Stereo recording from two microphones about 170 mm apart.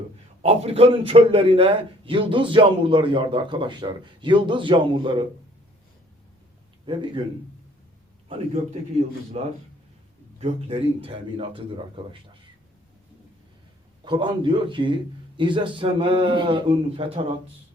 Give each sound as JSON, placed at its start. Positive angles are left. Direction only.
{"t": 0.4, "sound": "a man's voice", "side_deg": -35}
{"t": 6.8, "sound": "a man's voice", "side_deg": -30}
{"t": 9.0, "sound": "a man's voice", "side_deg": -40}
{"t": 14.0, "sound": "a man's voice", "side_deg": -25}